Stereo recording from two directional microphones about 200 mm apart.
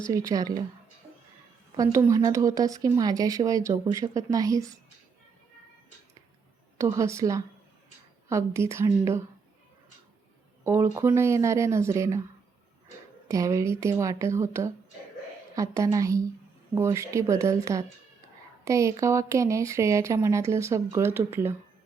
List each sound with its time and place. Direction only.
0.1 s speech: 15° right (ahead or behind)
1.0 s a sound: 15° right (ahead or behind)
1.7 s speech: 15° right (ahead or behind)
6.7 s speech: 15° right (ahead or behind)
10.6 s speech: 15° right (ahead or behind)
13.2 s speech: 15° right (ahead or behind)